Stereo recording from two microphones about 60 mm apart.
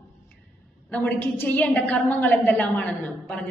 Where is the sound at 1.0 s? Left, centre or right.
Left.